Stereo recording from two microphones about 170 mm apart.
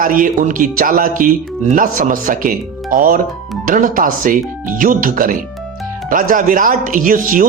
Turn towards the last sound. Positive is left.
turn(degrees=-55)  # may be behind; listen again after turning